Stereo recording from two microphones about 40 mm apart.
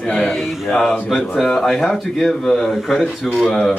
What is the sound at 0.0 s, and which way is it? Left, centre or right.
Speech, left.